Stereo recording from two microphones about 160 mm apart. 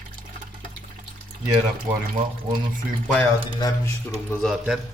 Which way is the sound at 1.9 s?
10° right (ahead or behind).